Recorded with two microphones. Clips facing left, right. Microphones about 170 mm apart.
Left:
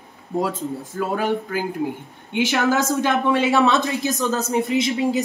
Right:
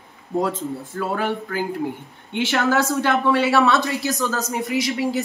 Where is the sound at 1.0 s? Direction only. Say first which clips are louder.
Left 2 dB; 15° left (ahead or behind).